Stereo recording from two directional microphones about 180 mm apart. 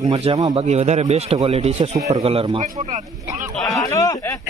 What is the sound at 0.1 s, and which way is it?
Speech, 35° right (ahead or behind).